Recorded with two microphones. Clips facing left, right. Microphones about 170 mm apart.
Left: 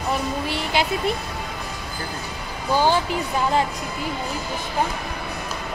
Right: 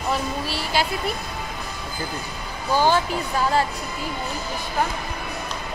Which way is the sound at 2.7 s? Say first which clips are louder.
Even; 15° left (ahead or behind).